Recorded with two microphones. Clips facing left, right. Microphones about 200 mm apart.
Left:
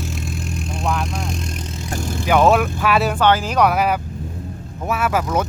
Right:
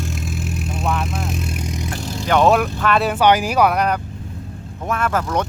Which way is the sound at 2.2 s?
5° left (ahead or behind).